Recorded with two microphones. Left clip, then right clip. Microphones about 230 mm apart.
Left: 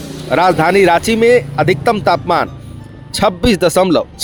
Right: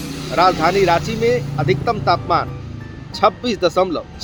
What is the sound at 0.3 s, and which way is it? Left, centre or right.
Speech, left.